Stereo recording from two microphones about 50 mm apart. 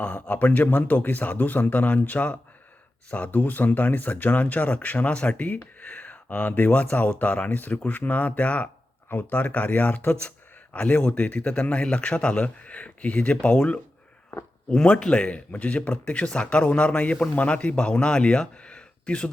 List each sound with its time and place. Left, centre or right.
0.0 s speech: left